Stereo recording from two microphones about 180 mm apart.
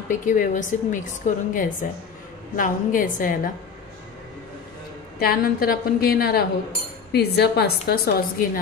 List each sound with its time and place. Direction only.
0.1 s a woman's voice: 45° left (ahead or behind)
5.2 s a woman's voice: 55° left (ahead or behind)